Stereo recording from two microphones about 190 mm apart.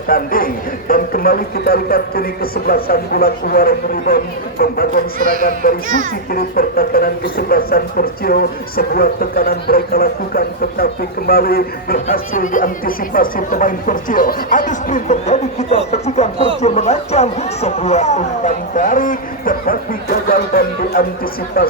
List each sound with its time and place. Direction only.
0.1 s speech: 50° left (ahead or behind)